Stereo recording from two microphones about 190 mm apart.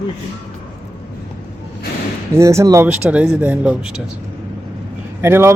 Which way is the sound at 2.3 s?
15° right (ahead or behind).